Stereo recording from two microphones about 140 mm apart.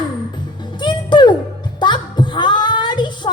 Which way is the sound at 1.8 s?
35° left (ahead or behind).